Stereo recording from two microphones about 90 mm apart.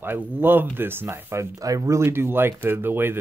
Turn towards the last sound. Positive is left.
turn(degrees=-25)  # may be behind; listen again after turning